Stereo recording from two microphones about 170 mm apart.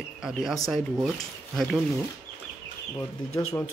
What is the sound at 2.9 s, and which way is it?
Speech, 15° left (ahead or behind).